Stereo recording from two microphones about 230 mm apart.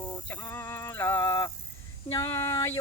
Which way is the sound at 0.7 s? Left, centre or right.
Centre.